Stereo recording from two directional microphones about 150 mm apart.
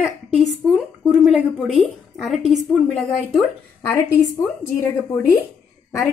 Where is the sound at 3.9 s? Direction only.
20° left (ahead or behind).